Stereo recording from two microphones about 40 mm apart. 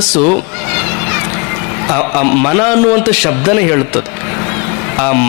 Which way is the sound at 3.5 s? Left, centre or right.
Centre.